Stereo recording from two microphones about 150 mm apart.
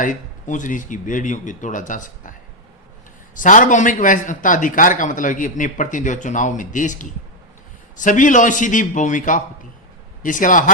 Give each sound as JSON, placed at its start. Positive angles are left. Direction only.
{"t": 0.0, "sound": "a man's voice", "side_deg": 60}
{"t": 3.3, "sound": "a man's voice", "side_deg": 60}